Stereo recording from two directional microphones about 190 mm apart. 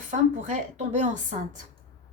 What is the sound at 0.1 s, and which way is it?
A woman's voice, 40° right (ahead or behind).